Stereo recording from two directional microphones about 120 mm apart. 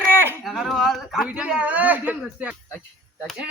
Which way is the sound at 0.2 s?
20° right (ahead or behind).